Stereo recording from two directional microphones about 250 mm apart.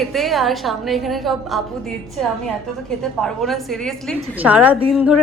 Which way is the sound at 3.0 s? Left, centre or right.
Centre.